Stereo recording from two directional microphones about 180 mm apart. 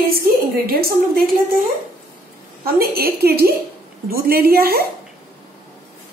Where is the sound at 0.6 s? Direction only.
55° right (ahead or behind).